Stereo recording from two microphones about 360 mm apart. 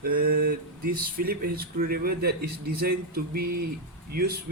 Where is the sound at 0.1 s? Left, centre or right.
Right.